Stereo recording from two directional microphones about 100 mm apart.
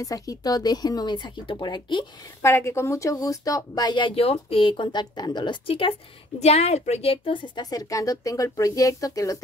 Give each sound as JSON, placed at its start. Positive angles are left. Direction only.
{"t": 0.0, "sound": "speech", "side_deg": 35}
{"t": 2.4, "sound": "speech", "side_deg": 25}
{"t": 4.1, "sound": "a woman's voice", "side_deg": 85}
{"t": 6.4, "sound": "a woman's voice", "side_deg": 90}
{"t": 7.9, "sound": "speech", "side_deg": 35}